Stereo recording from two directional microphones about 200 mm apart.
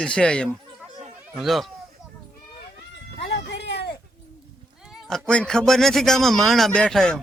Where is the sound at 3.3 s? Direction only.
60° left (ahead or behind).